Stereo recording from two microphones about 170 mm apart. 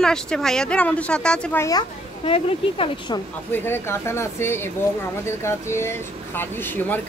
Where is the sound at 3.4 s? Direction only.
10° left (ahead or behind).